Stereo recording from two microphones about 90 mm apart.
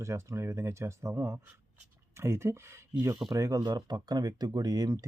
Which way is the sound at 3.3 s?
40° right (ahead or behind).